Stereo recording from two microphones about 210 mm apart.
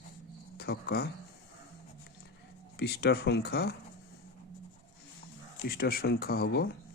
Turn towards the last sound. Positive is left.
turn(degrees=45)  # may be behind; listen again after turning